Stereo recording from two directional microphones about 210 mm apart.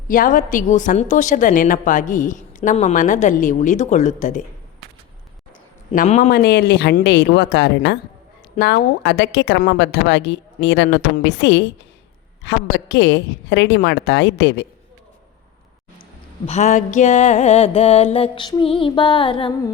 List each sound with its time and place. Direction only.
0.1 s a woman's voice: 40° left (ahead or behind)
5.9 s a woman's voice: 40° left (ahead or behind)
6.3 s a woman's voice: 45° left (ahead or behind)
16.5 s music: 35° left (ahead or behind)